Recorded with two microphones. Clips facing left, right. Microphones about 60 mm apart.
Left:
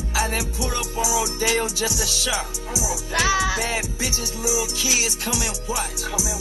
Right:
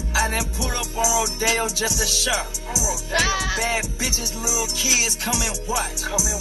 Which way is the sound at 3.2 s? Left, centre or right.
Left.